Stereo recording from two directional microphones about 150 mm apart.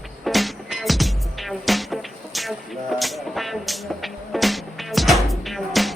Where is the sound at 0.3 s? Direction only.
Centre (ahead or behind).